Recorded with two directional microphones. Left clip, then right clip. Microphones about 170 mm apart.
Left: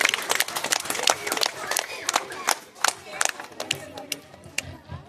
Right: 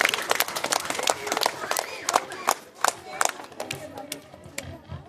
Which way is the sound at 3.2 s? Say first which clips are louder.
Left 1 dB; 85° right.